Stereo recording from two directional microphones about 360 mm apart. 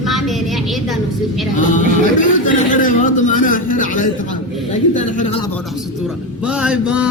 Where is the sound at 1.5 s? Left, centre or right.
Left.